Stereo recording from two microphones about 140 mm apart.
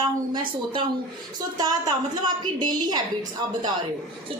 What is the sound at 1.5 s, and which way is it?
A woman's voice, 30° right (ahead or behind).